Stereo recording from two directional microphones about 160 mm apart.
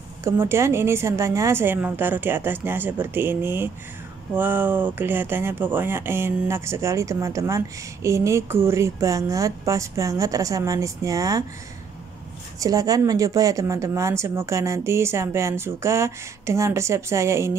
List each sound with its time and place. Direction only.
0.2 s speech: 15° right (ahead or behind)
12.5 s speech: 20° right (ahead or behind)